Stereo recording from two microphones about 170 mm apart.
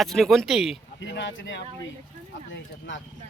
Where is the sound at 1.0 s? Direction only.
90° left.